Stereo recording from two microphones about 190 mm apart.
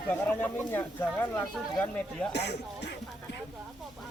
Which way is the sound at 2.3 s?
60° left (ahead or behind).